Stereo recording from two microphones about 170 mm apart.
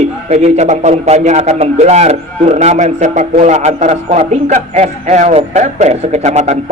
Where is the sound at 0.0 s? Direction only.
40° right (ahead or behind).